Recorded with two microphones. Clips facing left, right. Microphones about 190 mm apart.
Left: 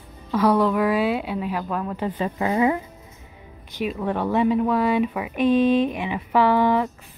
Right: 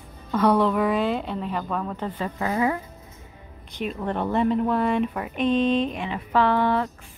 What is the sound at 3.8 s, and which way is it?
Speech, 5° left (ahead or behind).